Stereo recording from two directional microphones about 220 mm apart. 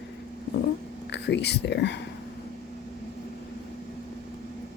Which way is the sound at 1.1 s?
50° left (ahead or behind).